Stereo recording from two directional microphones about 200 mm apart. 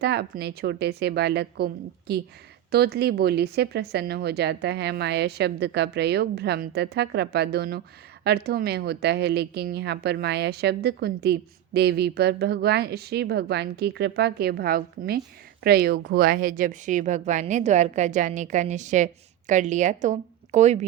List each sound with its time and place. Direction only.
0.0 s a woman's voice: 55° right (ahead or behind); by 20.8 s 35° right (ahead or behind)